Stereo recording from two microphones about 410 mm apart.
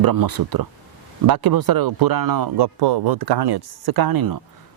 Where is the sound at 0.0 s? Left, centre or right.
Right.